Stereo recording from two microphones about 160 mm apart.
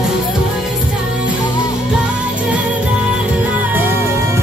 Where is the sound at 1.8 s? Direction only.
10° right (ahead or behind).